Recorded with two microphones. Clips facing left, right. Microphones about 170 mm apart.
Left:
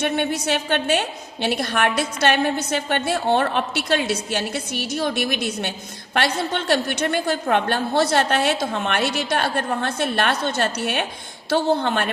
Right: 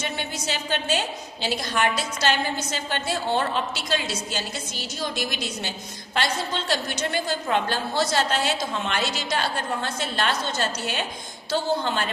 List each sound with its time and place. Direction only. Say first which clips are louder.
0.0 s a woman's voice: left 8 dB; 60° left (ahead or behind)